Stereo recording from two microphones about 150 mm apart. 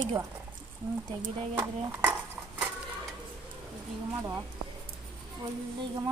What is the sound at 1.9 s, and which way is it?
Speech, 20° right (ahead or behind).